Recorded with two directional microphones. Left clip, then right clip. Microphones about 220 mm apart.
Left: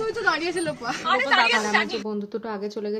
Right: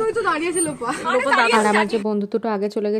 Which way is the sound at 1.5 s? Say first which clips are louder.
Right 5 dB; 40° right (ahead or behind).